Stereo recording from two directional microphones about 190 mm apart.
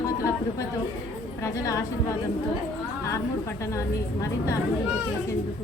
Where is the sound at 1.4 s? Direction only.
15° left (ahead or behind).